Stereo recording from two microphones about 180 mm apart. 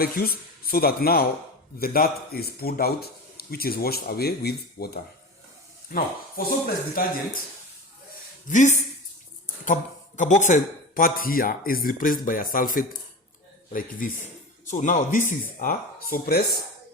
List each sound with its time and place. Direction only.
0.0 s speech: 55° left (ahead or behind)
8.4 s speech: 45° left (ahead or behind)
10.2 s speech: 45° left (ahead or behind)
14.7 s speech: 45° left (ahead or behind); by 16.5 s 60° left (ahead or behind)